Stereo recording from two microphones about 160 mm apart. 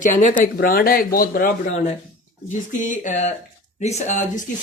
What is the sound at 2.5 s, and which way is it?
Speech, 50° left (ahead or behind).